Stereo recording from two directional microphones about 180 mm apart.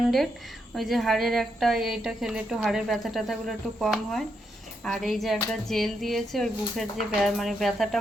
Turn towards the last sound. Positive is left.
turn(degrees=0)  # may be behind; listen again after turning